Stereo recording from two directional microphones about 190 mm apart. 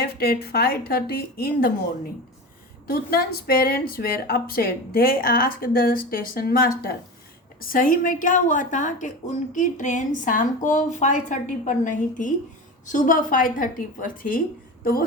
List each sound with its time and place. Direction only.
0.0 s a woman's voice: 55° left (ahead or behind)
2.8 s a woman's voice: 55° left (ahead or behind)